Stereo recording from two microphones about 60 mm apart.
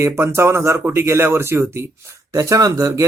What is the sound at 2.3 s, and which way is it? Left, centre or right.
Speech, right.